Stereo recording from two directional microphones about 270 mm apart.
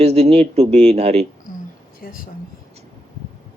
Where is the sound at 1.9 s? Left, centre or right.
Left.